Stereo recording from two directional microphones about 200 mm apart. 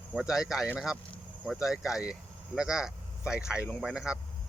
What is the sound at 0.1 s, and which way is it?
Speech, 5° right (ahead or behind).